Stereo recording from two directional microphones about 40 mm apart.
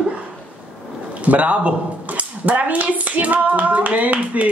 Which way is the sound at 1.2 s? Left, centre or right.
Right.